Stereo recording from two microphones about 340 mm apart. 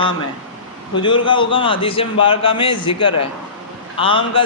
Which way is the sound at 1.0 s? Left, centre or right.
Centre.